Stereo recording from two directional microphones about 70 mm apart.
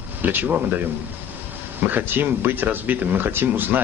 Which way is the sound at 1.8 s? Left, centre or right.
Right.